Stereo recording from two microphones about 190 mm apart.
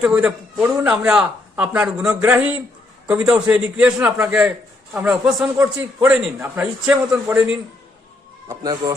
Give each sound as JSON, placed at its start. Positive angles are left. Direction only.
{"t": 0.0, "sound": "a man's voice", "side_deg": -5}
{"t": 8.4, "sound": "speech", "side_deg": -20}